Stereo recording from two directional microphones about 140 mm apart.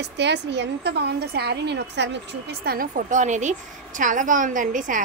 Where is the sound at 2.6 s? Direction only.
90° right.